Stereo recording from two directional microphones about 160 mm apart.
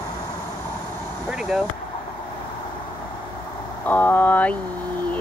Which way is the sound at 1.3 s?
5° right (ahead or behind).